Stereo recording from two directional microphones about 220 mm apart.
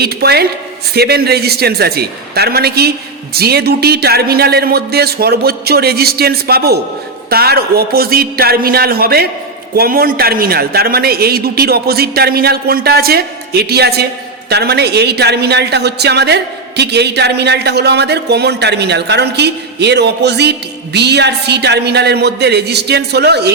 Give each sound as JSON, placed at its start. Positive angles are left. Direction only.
{"t": 0.0, "sound": "a woman's voice", "side_deg": -45}